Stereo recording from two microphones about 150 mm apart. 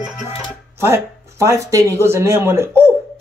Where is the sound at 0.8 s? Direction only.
20° right (ahead or behind).